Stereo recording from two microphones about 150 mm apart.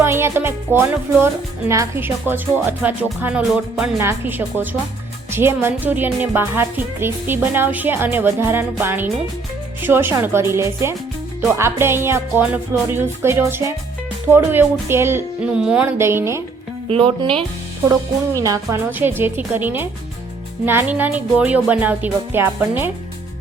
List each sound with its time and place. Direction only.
0.0 s speech: 15° right (ahead or behind)
3.4 s music: 5° right (ahead or behind)
3.9 s speech: 15° right (ahead or behind)
16.0 s speech: 15° right (ahead or behind)
16.9 s speech: 35° right (ahead or behind)
18.3 s speech: 20° right (ahead or behind)